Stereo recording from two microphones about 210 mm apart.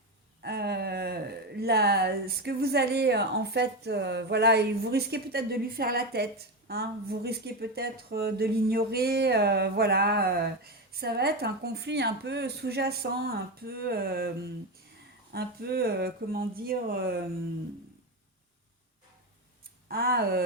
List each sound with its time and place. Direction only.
0.4 s speech: 50° right (ahead or behind)
15.3 s speech: 50° right (ahead or behind)
19.9 s speech: 45° right (ahead or behind)